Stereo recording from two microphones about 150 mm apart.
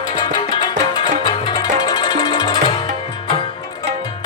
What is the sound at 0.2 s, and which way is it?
Music, 30° left (ahead or behind).